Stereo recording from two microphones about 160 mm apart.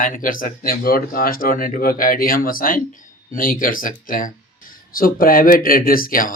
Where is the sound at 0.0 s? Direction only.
55° left (ahead or behind).